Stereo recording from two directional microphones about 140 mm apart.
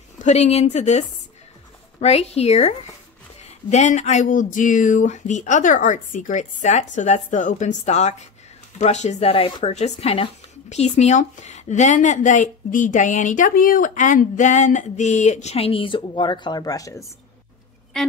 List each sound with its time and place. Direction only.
0.2 s speech: 50° left (ahead or behind); by 17.0 s 25° left (ahead or behind)
17.9 s speech: 5° left (ahead or behind)